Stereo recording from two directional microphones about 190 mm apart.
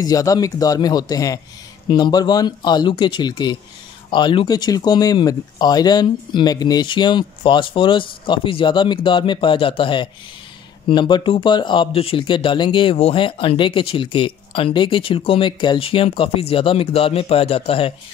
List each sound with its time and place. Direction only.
0.0 s speech: 20° left (ahead or behind)